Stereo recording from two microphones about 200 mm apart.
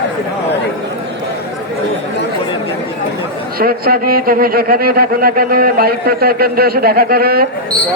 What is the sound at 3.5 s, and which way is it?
A man's voice, 50° right (ahead or behind).